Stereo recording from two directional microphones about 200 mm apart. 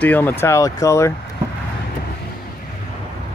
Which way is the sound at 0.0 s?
10° left (ahead or behind).